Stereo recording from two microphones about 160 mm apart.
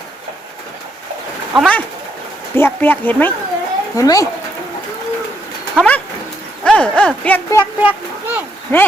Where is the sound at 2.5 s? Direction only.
15° left (ahead or behind).